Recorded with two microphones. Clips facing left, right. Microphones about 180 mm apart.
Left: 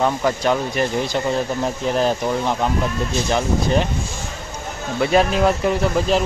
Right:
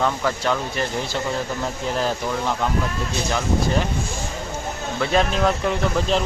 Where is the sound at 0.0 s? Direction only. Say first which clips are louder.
Left 3 dB; 20° left (ahead or behind).